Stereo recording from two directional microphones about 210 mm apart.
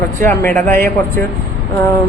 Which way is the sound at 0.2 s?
10° left (ahead or behind).